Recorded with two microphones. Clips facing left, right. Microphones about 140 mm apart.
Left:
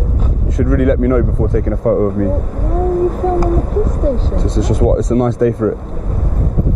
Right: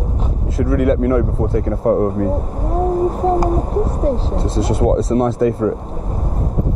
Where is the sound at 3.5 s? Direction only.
35° right (ahead or behind).